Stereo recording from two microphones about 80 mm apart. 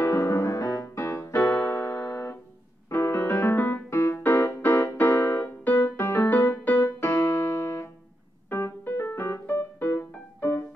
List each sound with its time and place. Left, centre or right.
0.0 s piano: left
0.8 s music: left
3.9 s music: left
5.4 s music: left
8.5 s piano: left